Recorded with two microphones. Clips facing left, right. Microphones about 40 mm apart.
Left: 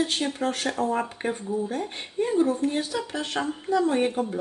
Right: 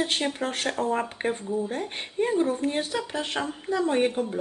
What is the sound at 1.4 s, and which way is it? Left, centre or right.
Speech, centre.